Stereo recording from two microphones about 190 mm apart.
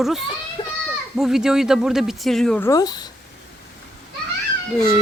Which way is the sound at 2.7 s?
20° left (ahead or behind).